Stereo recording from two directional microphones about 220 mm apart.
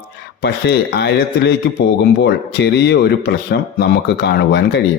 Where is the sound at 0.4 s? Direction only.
50° left (ahead or behind).